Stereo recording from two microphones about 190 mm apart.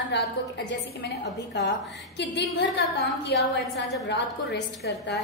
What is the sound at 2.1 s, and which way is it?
A woman's voice, 65° left (ahead or behind).